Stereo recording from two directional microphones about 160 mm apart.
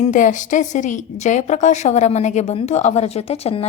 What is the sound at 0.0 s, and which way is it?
A woman's voice, 55° left (ahead or behind).